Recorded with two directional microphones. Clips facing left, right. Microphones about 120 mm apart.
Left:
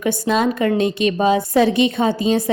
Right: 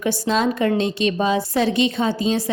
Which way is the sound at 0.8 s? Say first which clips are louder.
Left 3 dB; 50° left (ahead or behind).